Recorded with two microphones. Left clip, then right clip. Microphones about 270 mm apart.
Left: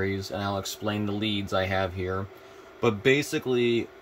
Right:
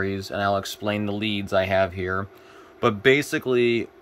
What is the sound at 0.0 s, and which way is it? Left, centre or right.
A man's voice, centre.